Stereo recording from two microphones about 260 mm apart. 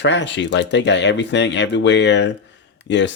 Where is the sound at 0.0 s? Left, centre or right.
Left.